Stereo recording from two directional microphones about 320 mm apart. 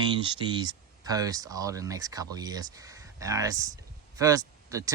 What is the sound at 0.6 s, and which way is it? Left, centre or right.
Speech, centre.